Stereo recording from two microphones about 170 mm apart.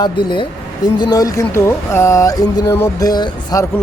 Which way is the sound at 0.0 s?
25° left (ahead or behind).